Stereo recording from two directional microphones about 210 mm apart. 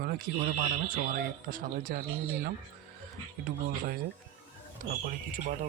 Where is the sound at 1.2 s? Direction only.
45° right (ahead or behind).